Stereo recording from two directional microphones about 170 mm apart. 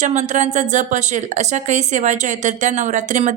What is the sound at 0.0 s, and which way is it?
Speech, 45° right (ahead or behind).